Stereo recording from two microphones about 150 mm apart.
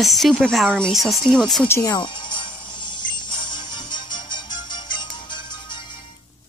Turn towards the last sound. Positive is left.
turn(degrees=30)  # may be behind; listen again after turning